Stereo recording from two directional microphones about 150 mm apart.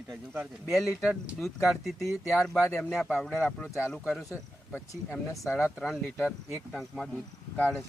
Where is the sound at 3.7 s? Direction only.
20° left (ahead or behind).